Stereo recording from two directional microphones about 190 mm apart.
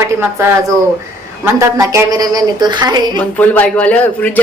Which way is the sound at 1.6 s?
15° right (ahead or behind).